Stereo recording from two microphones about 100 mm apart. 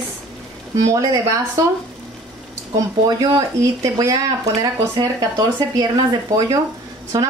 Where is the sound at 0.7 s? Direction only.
35° right (ahead or behind).